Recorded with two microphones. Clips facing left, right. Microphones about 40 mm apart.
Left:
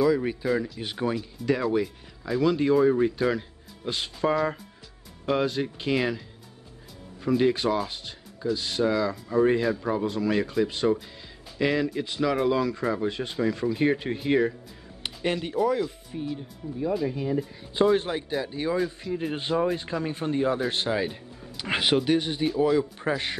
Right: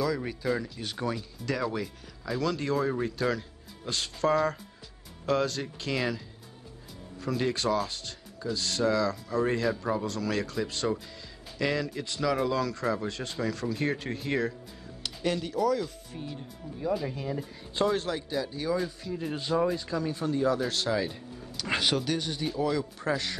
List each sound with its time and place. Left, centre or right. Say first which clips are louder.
0.0 s speech: left 6 dB; centre
7.2 s speech: left 5 dB; centre
15.0 s speech: left 2 dB; left
16.8 s speech: left 4 dB; centre
17.9 s speech: left 4 dB; left